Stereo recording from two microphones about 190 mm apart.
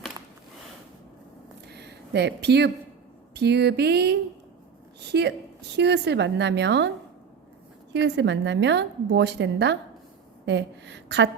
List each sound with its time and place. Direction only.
1.7 s a woman's voice: 60° right (ahead or behind)
7.9 s a woman's voice: 70° right (ahead or behind)